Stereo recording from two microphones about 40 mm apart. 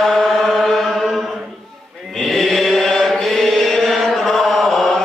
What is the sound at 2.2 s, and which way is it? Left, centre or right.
Chant, centre.